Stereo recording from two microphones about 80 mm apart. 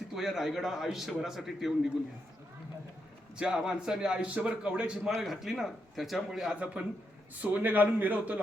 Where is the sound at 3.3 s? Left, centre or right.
Centre.